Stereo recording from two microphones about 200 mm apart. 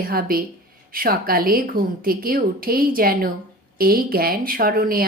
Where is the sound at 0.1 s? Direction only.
45° right (ahead or behind).